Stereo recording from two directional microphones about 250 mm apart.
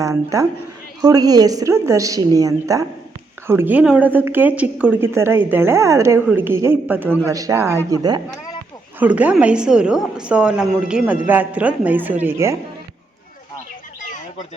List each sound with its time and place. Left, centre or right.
0.0 s a woman's voice: centre